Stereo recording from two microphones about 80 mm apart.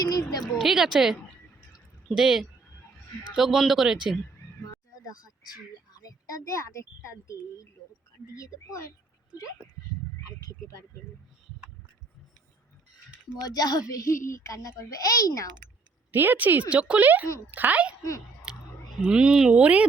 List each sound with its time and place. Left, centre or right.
0.0 s speech: left
0.4 s a woman's voice: centre
2.1 s a woman's voice: centre
5.0 s a child's voice: left
13.5 s a child's voice: left
16.1 s speech: right
18.9 s speech: centre